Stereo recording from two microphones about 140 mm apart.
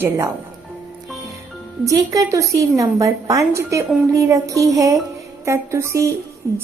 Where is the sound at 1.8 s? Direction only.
25° right (ahead or behind).